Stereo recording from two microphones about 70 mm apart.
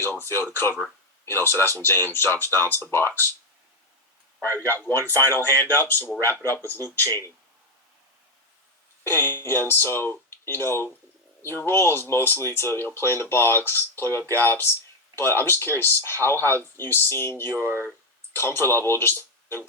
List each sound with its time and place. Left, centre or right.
0.0 s speech: left
4.4 s speech: left
9.0 s speech: left